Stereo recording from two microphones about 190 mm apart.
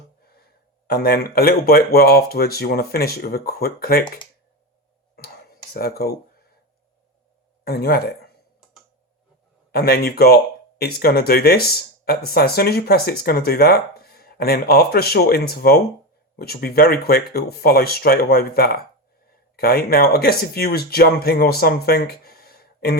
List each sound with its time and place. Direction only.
0.2 s gasp: 55° left (ahead or behind)
0.9 s speech: 55° left (ahead or behind)
5.1 s a sound: 55° left (ahead or behind)
7.6 s speech: 55° left (ahead or behind)
9.7 s speech: 55° left (ahead or behind)